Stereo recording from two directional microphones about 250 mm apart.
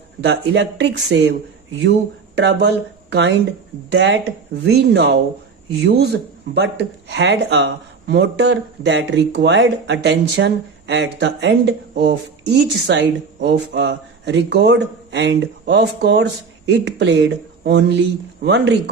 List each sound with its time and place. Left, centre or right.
0.3 s speech: right